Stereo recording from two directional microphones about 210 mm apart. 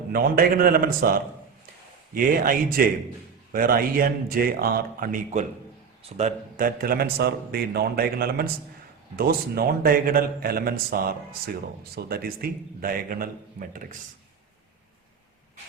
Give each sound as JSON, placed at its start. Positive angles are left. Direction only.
{"t": 0.1, "sound": "a man's voice", "side_deg": -45}